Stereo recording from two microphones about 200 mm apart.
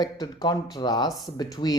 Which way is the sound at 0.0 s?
20° left (ahead or behind).